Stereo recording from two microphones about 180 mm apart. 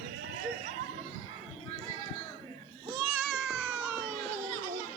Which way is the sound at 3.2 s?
5° right (ahead or behind).